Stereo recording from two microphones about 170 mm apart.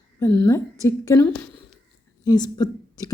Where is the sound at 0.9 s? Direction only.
15° left (ahead or behind).